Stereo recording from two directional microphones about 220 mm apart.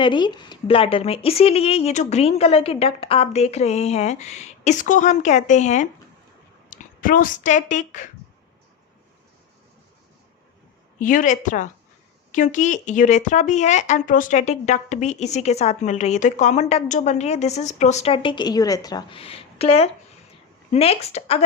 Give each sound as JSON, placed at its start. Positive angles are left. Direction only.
{"t": 0.0, "sound": "speech", "side_deg": 20}
{"t": 11.0, "sound": "speech", "side_deg": 35}